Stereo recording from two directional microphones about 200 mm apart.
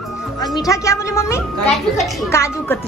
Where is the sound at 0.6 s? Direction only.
15° left (ahead or behind).